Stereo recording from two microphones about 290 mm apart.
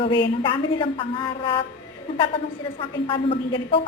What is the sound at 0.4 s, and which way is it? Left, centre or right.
A woman's voice, centre.